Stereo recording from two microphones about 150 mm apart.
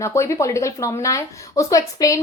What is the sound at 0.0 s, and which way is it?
Speech, 20° left (ahead or behind).